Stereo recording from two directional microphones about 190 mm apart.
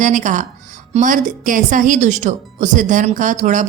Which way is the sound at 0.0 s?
40° right (ahead or behind).